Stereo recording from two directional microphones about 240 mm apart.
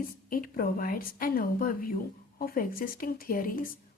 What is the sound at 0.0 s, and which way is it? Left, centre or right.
A woman's voice, left.